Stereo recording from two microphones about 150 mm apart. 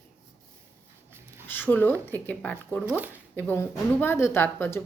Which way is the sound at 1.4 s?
15° left (ahead or behind).